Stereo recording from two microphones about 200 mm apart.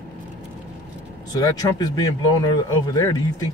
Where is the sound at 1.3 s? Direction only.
20° left (ahead or behind).